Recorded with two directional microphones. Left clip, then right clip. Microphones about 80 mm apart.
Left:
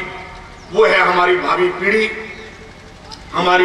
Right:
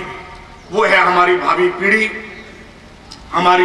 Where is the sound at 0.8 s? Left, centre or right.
Right.